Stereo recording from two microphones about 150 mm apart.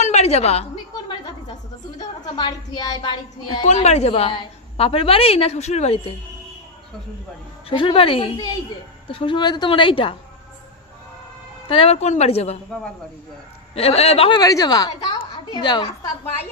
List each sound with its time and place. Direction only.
0.0 s a sound: 45° left (ahead or behind)
2.0 s a woman's voice: 30° left (ahead or behind)
3.6 s a woman's voice: 50° left (ahead or behind)
7.7 s a woman's voice: 35° left (ahead or behind)
11.7 s a woman's voice: 40° left (ahead or behind)
13.7 s a woman's voice: 45° left (ahead or behind)
14.4 s a woman's voice: 25° left (ahead or behind)